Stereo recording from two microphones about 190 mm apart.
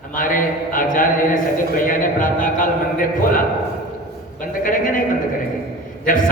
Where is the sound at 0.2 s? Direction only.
45° left (ahead or behind).